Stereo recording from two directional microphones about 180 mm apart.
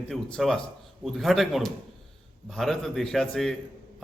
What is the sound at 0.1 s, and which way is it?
A man's voice, centre (ahead or behind).